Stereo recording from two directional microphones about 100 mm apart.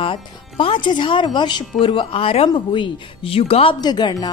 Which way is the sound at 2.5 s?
55° left (ahead or behind).